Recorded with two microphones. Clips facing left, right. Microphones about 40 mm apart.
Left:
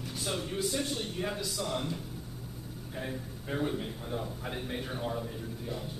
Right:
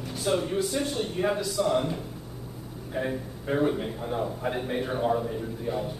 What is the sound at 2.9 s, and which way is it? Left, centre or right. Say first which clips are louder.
A man's voice: right 9 dB; right.